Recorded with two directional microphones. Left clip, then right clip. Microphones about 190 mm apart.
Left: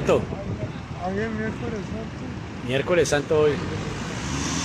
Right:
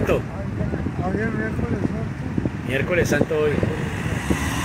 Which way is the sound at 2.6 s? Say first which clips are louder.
Left 1 dB; 15° left (ahead or behind).